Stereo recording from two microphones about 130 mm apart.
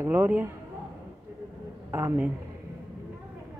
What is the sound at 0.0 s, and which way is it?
Speech, 20° right (ahead or behind).